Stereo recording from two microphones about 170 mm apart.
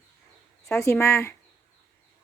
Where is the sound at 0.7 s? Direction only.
15° left (ahead or behind).